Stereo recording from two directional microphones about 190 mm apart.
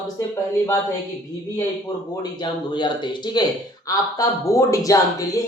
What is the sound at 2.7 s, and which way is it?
Speech, 25° left (ahead or behind).